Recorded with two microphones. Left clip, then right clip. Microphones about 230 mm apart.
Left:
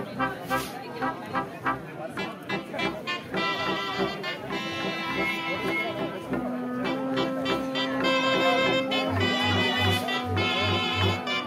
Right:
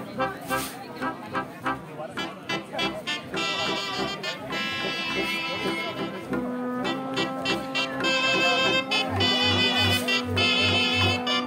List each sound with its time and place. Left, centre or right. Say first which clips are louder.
1.3 s music: left 1 dB; right